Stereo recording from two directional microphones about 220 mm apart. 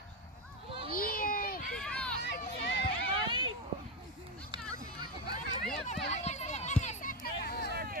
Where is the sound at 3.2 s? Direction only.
20° right (ahead or behind).